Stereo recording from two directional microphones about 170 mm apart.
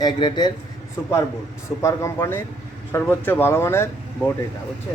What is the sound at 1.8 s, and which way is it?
Speech, 15° left (ahead or behind).